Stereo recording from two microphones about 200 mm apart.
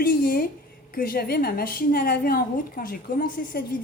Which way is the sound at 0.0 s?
45° left (ahead or behind).